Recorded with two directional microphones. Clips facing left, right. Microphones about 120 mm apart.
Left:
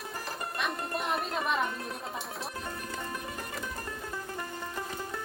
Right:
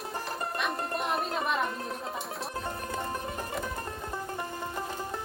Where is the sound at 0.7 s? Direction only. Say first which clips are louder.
Right 2 dB; 35° right (ahead or behind).